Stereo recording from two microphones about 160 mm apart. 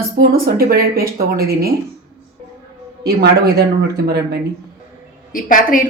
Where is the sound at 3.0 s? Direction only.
90° right.